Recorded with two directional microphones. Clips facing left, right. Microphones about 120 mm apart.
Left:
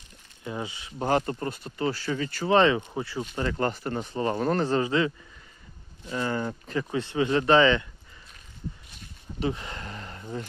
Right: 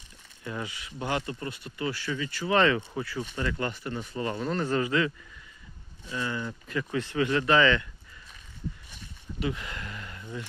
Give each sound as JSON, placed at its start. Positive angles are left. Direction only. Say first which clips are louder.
{"t": 0.4, "sound": "speech", "louder": "left 2 dB", "side_deg": 25}
{"t": 0.9, "sound": "speech", "louder": "left 6 dB", "side_deg": 40}
{"t": 2.5, "sound": "speech", "louder": "left 3 dB", "side_deg": 25}
{"t": 4.4, "sound": "speech", "louder": "left 6 dB", "side_deg": 45}
{"t": 4.6, "sound": "speech", "louder": "left 2 dB", "side_deg": 30}
{"t": 6.1, "sound": "speech", "louder": "left 4 dB", "side_deg": 40}
{"t": 9.4, "sound": "speech", "louder": "left 3 dB", "side_deg": 30}